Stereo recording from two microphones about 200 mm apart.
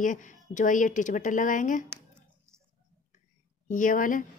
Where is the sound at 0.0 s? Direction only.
40° left (ahead or behind).